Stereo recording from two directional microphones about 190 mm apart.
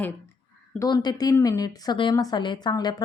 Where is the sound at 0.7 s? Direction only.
20° left (ahead or behind).